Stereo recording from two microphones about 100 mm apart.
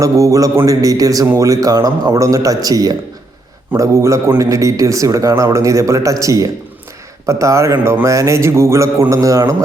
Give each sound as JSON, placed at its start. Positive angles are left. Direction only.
{"t": 0.0, "sound": "a man's voice", "side_deg": -35}